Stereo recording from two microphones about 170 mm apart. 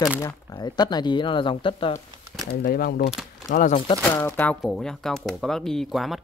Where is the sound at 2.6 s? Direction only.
65° left (ahead or behind).